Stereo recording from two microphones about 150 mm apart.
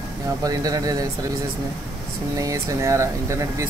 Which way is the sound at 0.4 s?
25° right (ahead or behind).